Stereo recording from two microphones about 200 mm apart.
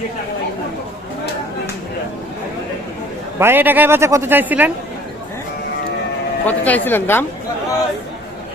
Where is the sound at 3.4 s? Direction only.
10° right (ahead or behind).